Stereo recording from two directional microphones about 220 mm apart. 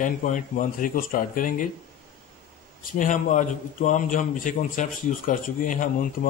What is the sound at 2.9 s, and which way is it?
A man's voice, 35° left (ahead or behind).